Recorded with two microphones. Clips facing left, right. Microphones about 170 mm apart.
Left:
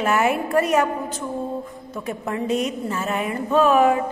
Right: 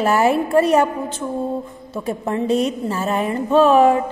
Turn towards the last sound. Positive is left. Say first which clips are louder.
# right 4 dB
turn(degrees=-30)  # may be behind; listen again after turning